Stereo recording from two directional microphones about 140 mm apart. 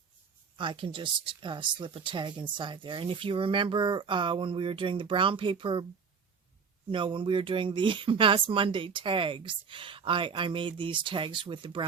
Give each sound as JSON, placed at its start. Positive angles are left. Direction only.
{"t": 0.5, "sound": "speech", "side_deg": -35}
{"t": 6.9, "sound": "speech", "side_deg": -35}